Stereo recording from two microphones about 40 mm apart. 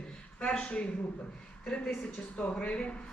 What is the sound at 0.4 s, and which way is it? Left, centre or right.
A man's voice, left.